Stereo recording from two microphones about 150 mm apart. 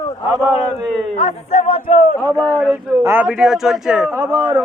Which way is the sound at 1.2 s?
55° left (ahead or behind).